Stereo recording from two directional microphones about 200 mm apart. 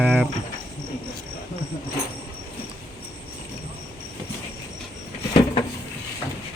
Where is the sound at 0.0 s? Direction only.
5° right (ahead or behind).